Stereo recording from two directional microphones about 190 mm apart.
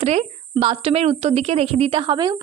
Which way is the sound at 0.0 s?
35° right (ahead or behind).